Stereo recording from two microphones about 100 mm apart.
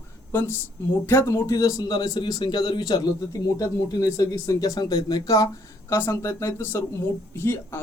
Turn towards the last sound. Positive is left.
turn(degrees=20)  # may be behind; listen again after turning